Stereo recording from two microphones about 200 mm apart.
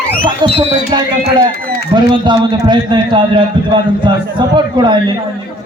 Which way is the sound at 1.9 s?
25° right (ahead or behind).